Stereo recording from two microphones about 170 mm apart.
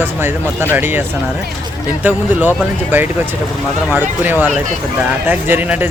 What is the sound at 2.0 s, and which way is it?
Speech, 10° right (ahead or behind).